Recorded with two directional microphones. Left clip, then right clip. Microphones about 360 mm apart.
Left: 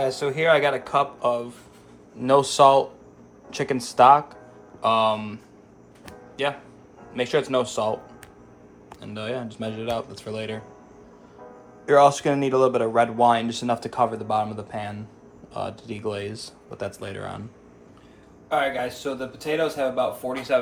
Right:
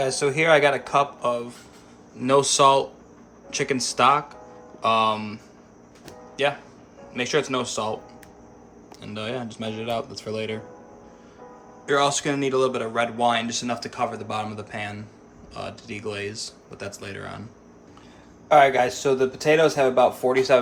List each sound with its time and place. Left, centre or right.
0.0 s speech: centre
6.4 s speech: centre
9.0 s speech: centre
11.9 s speech: centre
18.4 s a man's voice: centre